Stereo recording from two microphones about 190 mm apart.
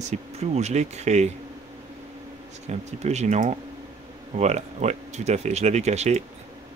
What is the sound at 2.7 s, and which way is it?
Speech, 35° right (ahead or behind).